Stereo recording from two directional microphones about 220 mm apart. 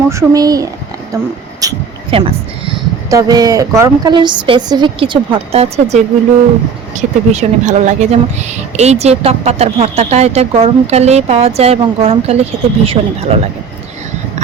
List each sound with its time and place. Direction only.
0.1 s speech: 15° right (ahead or behind)